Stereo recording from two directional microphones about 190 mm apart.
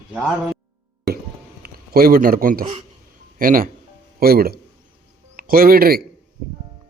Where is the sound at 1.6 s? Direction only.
50° right (ahead or behind).